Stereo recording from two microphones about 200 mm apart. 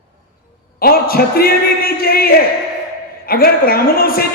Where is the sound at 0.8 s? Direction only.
50° left (ahead or behind).